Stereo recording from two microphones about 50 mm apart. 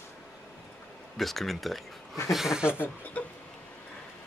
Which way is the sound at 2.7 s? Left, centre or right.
Left.